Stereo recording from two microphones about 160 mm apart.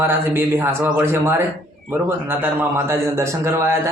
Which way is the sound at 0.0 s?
15° right (ahead or behind).